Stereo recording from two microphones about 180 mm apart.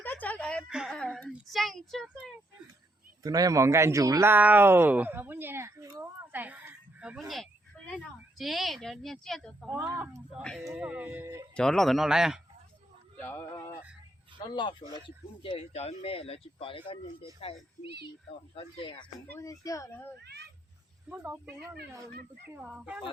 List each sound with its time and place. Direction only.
0.0 s a sound: 10° left (ahead or behind)
1.3 s a child's voice: centre (ahead or behind)
3.2 s speech: 20° right (ahead or behind); by 9.6 s centre (ahead or behind)
9.6 s speech: 10° right (ahead or behind)
11.5 s speech: 5° left (ahead or behind)
13.2 s speech: 15° left (ahead or behind)
18.5 s speech: 25° left (ahead or behind)
19.3 s speech: 15° left (ahead or behind)
20.1 s a child's voice: 70° right (ahead or behind)
21.1 s speech: 10° right (ahead or behind)
22.6 s speech: 5° right (ahead or behind)